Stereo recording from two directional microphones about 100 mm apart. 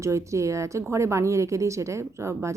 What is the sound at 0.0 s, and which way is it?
Speech, 30° right (ahead or behind).